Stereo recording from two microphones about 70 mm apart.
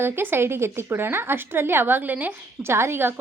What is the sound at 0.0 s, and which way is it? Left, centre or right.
Speech, right.